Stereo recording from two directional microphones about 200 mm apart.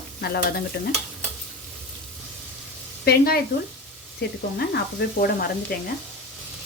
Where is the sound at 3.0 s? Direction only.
50° left (ahead or behind).